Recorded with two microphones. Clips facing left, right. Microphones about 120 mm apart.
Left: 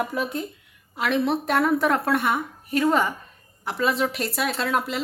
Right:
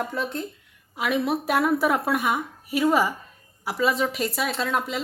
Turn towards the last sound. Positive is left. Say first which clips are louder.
# left 1 dB
turn(degrees=0)  # may be behind; listen again after turning